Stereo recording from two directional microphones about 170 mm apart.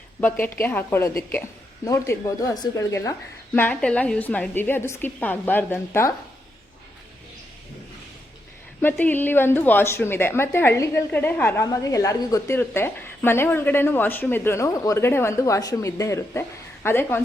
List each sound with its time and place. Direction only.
0.2 s a woman's voice: 10° left (ahead or behind)
8.8 s a woman's voice: 10° left (ahead or behind)